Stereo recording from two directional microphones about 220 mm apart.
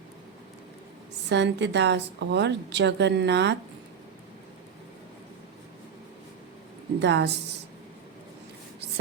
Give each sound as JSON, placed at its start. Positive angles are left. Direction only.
{"t": 1.3, "sound": "a woman's voice", "side_deg": -55}
{"t": 7.0, "sound": "a woman's voice", "side_deg": -50}